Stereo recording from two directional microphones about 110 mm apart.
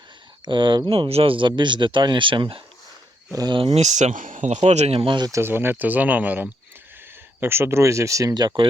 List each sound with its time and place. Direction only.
0.4 s speech: 45° right (ahead or behind)
3.3 s speech: 40° right (ahead or behind)
3.8 s speech: 90° right; by 5.2 s 55° right (ahead or behind)
5.2 s speech: 25° right (ahead or behind)